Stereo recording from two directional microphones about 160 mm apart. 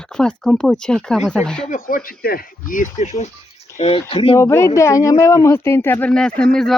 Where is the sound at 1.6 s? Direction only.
60° left (ahead or behind).